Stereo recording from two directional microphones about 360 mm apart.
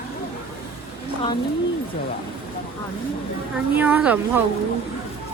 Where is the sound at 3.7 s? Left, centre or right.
Centre.